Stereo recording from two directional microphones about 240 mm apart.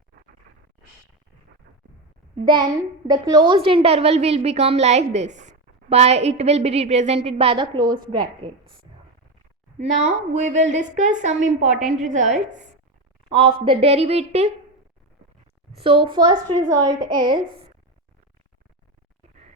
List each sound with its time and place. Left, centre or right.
2.4 s a woman's voice: centre
9.7 s a woman's voice: right
15.7 s a woman's voice: right